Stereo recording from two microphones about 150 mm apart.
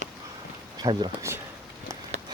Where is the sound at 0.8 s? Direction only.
30° right (ahead or behind).